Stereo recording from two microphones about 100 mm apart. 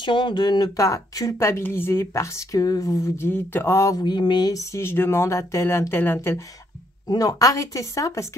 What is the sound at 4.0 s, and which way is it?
Speech, 50° left (ahead or behind).